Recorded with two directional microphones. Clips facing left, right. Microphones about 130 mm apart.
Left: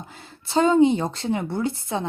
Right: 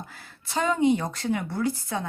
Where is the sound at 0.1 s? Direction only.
25° left (ahead or behind).